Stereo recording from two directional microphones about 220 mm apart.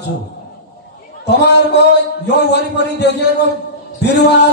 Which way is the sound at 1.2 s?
50° left (ahead or behind).